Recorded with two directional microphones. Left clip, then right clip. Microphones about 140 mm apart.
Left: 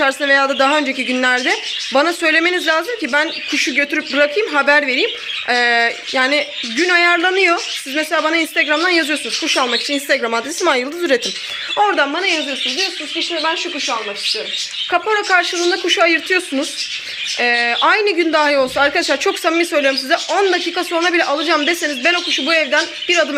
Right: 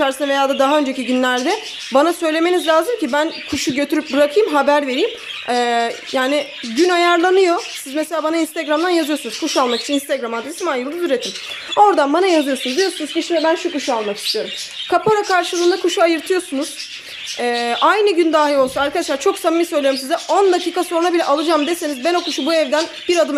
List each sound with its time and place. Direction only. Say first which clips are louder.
0.0 s a woman's voice: left 3 dB; 15° right (ahead or behind)
8.6 s speech: right 1 dB; 15° right (ahead or behind)
10.2 s a woman's voice: left 5 dB; 5° right (ahead or behind)
11.9 s speech: right 2 dB; 35° right (ahead or behind)
12.2 s speech: right 2 dB; 50° right (ahead or behind)
14.8 s speech: right 2 dB; 30° right (ahead or behind)
15.5 s a woman's voice: right 1 dB; 10° right (ahead or behind)
15.9 s speech: left 2 dB; 25° right (ahead or behind)
17.4 s a woman's voice: left 1 dB; 20° right (ahead or behind)